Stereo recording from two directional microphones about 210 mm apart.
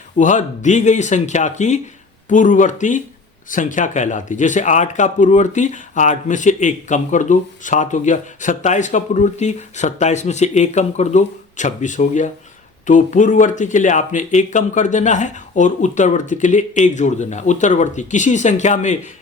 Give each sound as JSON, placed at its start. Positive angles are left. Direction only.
{"t": 0.2, "sound": "speech", "side_deg": 35}